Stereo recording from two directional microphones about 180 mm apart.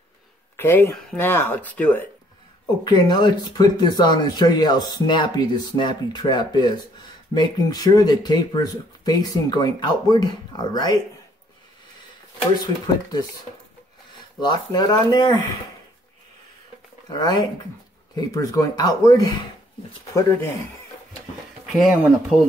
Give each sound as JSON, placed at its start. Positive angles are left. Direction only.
{"t": 0.6, "sound": "speech", "side_deg": 10}
{"t": 2.8, "sound": "speech", "side_deg": 25}
{"t": 12.5, "sound": "speech", "side_deg": 20}
{"t": 14.7, "sound": "speech", "side_deg": 25}
{"t": 17.1, "sound": "speech", "side_deg": 25}
{"t": 21.7, "sound": "speech", "side_deg": 0}